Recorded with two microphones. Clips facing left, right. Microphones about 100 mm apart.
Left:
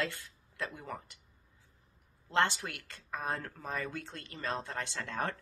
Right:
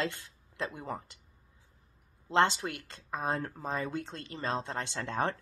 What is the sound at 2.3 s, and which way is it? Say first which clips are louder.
Speech: right 4 dB; 25° right (ahead or behind).